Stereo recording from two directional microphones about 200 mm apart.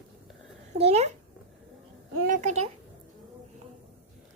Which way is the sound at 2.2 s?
40° right (ahead or behind).